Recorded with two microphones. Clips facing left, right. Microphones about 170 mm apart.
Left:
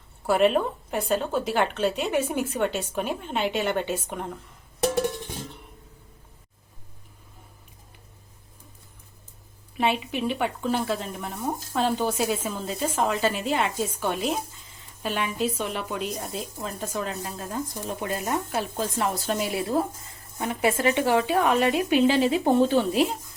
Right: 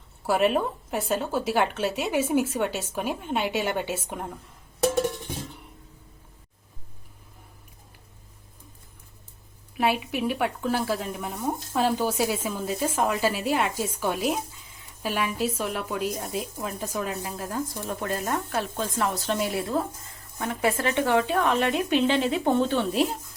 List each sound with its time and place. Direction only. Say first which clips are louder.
0.3 s speech: left 2 dB; 5° right (ahead or behind)
9.7 s speech: even; 5° right (ahead or behind)
18.0 s a woman's voice: left 1 dB; 10° left (ahead or behind)
20.4 s a woman's voice: left 2 dB; 20° left (ahead or behind); by 23.1 s centre (ahead or behind)